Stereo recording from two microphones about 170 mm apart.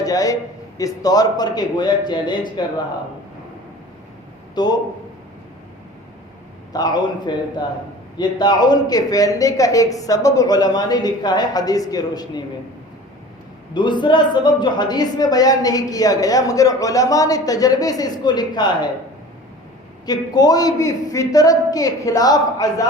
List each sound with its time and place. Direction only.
0.0 s a man's voice: 20° left (ahead or behind)
4.5 s a man's voice: 25° left (ahead or behind)
6.7 s speech: 25° left (ahead or behind)
13.7 s speech: 25° left (ahead or behind)
20.1 s speech: 25° left (ahead or behind)